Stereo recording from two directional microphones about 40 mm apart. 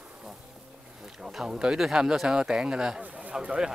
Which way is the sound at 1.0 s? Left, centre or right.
Centre.